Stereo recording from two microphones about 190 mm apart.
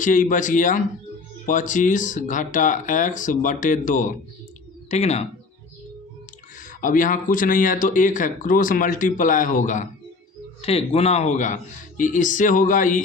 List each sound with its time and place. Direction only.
0.0 s speech: 45° left (ahead or behind)
6.6 s speech: 45° left (ahead or behind)